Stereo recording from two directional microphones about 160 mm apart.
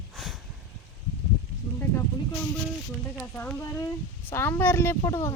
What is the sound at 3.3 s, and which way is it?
Speech, 10° left (ahead or behind).